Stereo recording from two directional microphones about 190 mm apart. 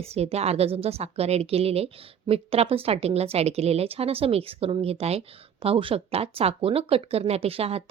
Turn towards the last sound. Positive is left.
turn(degrees=-30)  # may be behind; listen again after turning